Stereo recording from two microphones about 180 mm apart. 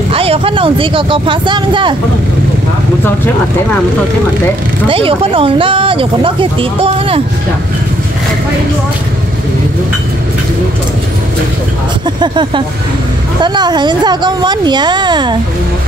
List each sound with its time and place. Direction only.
0.1 s speech: 30° right (ahead or behind)
4.8 s speech: 30° right (ahead or behind)
12.2 s speech: 25° right (ahead or behind)